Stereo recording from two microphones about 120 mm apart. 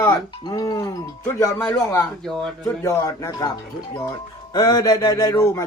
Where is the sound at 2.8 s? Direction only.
25° left (ahead or behind).